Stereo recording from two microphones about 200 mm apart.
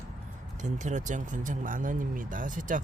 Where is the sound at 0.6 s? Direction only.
35° right (ahead or behind).